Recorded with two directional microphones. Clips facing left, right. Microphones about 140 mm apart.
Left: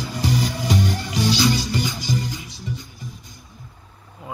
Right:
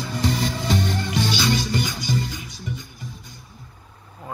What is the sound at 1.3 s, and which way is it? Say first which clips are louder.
Music: left 6 dB; 25° right (ahead or behind).